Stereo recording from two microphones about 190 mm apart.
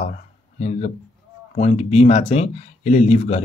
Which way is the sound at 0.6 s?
35° left (ahead or behind).